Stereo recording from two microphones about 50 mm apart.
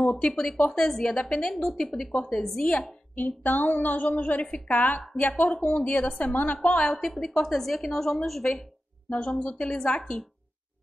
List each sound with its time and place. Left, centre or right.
0.0 s speech: left
1.5 s a woman's voice: centre
3.2 s a sound: left
4.2 s a woman's voice: left
4.6 s a sound: left
5.5 s a woman's voice: left
6.9 s a woman's voice: centre
9.4 s a woman's voice: left